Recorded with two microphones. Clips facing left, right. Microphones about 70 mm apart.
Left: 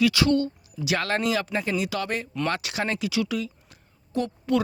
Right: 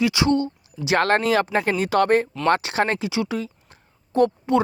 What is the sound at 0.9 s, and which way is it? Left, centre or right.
Speech, right.